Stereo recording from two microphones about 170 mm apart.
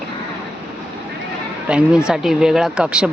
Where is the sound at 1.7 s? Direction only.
5° right (ahead or behind).